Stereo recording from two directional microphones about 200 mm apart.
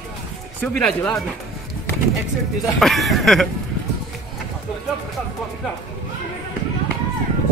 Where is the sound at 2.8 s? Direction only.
Centre (ahead or behind).